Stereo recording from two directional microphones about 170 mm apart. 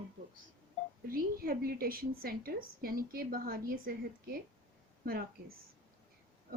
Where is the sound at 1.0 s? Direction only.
60° right (ahead or behind).